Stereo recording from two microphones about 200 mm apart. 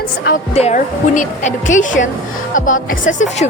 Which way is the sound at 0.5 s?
35° left (ahead or behind).